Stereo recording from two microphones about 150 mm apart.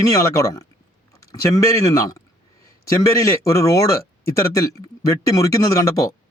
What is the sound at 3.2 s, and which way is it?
Speech, 20° left (ahead or behind).